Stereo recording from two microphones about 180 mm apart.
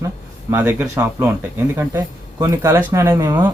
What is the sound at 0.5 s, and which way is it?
Speech, 10° right (ahead or behind).